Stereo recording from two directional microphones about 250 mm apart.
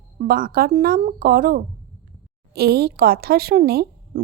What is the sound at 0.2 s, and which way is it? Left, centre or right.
Speech, right.